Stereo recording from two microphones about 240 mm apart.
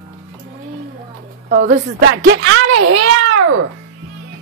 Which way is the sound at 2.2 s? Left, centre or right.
Right.